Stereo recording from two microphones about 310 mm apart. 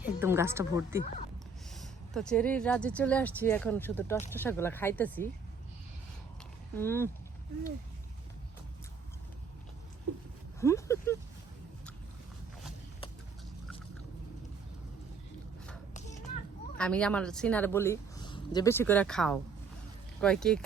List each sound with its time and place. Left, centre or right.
0.0 s a woman's voice: centre
6.7 s speech: centre
10.6 s speech: centre
16.0 s children playing: left
16.7 s a woman's voice: centre